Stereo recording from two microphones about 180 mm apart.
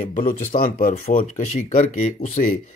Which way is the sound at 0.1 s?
45° left (ahead or behind).